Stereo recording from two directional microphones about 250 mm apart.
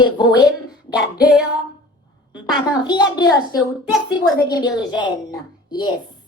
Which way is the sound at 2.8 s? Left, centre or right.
Centre.